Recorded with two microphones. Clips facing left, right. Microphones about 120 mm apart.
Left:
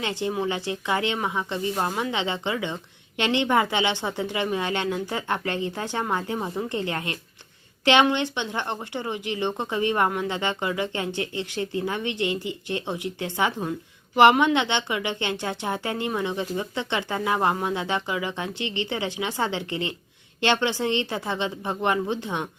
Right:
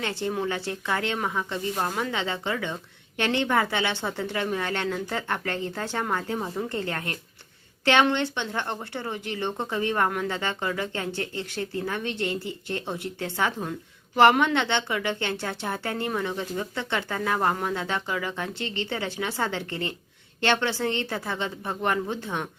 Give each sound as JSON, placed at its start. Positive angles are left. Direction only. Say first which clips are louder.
{"t": 0.0, "sound": "a woman's voice", "louder": "left 2 dB", "side_deg": 15}